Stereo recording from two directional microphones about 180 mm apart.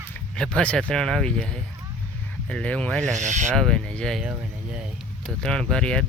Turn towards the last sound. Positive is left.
turn(degrees=5)  # may be behind; listen again after turning